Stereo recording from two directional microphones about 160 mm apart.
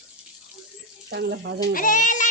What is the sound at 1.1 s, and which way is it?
Speech, 90° right.